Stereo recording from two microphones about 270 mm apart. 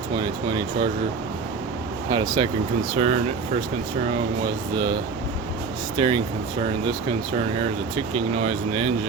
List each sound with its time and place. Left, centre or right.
0.2 s speech: centre
2.1 s speech: centre
6.0 s speech: centre
7.9 s speech: right